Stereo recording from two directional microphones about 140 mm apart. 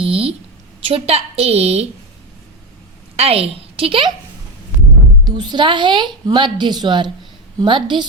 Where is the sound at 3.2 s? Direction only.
45° right (ahead or behind).